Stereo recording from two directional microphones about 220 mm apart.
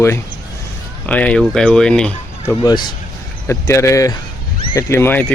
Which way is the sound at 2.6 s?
20° left (ahead or behind).